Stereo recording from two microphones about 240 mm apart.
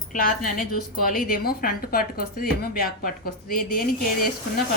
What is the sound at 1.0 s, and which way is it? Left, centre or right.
A woman's voice, left.